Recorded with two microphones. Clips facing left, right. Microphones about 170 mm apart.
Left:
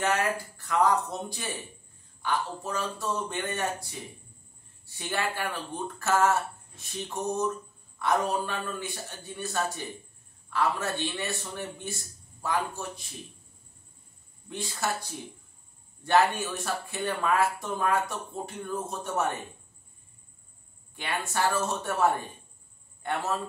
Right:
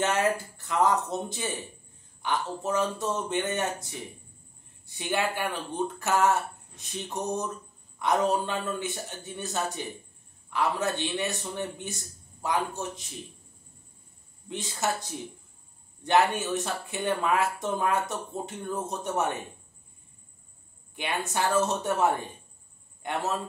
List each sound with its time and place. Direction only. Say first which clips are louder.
0.0 s speech: right 2 dB; 20° right (ahead or behind)
14.5 s speech: right 2 dB; 20° right (ahead or behind)
20.9 s speech: right 1 dB; 20° right (ahead or behind)
23.0 s a man's voice: left 1 dB; 15° right (ahead or behind)